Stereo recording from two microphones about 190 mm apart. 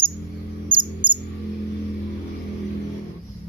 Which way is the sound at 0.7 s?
25° right (ahead or behind).